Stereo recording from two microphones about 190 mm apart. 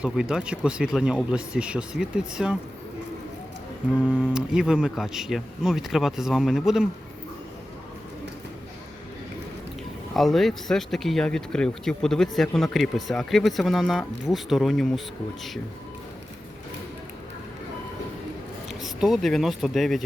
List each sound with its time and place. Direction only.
0.0 s speech: 5° right (ahead or behind)
4.0 s speech: 5° right (ahead or behind)
10.2 s speech: centre (ahead or behind)
18.7 s speech: centre (ahead or behind)